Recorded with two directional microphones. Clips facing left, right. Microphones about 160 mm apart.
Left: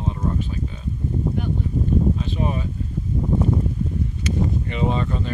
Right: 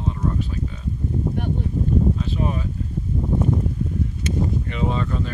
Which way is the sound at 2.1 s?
5° left (ahead or behind).